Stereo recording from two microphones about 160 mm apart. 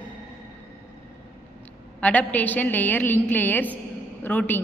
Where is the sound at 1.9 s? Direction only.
10° left (ahead or behind).